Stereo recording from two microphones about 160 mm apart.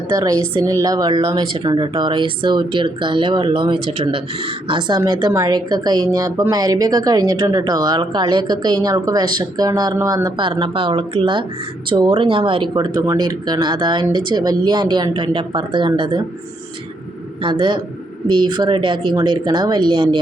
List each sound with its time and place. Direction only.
0.1 s a woman's voice: 25° right (ahead or behind)
17.4 s a man's voice: 30° right (ahead or behind)